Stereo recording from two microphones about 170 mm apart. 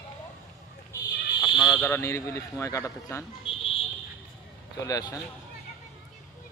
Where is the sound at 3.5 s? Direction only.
30° left (ahead or behind).